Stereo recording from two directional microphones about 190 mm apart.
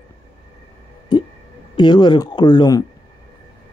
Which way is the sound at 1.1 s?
20° left (ahead or behind).